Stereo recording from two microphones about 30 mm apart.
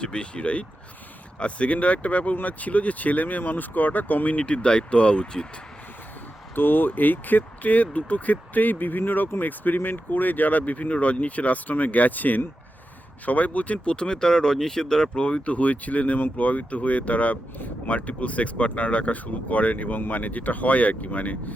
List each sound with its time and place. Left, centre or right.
0.0 s speech: left
4.4 s speech: left
6.7 s speech: left
13.8 s speech: left
15.5 s speech: left
19.9 s speech: left